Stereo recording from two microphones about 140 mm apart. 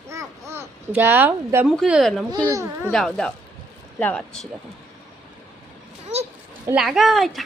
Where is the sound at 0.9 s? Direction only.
15° right (ahead or behind).